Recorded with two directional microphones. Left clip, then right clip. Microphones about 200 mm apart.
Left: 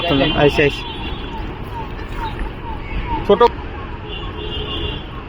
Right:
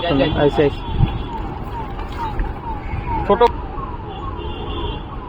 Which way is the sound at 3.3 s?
45° left (ahead or behind).